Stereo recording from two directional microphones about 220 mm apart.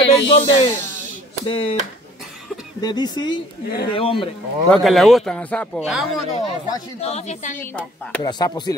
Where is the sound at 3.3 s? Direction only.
45° left (ahead or behind).